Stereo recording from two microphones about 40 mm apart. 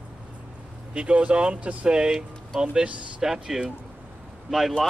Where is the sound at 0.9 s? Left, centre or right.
Right.